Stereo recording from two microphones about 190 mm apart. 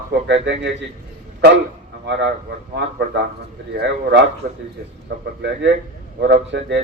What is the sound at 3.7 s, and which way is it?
Speech, 65° right (ahead or behind).